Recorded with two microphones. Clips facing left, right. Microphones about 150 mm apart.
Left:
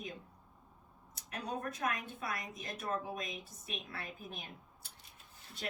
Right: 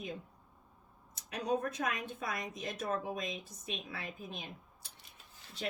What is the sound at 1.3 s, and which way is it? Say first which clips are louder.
A woman's voice: right 6 dB; 90° right.